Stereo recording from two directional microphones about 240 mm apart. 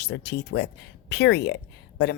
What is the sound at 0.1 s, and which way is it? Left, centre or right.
Speech, left.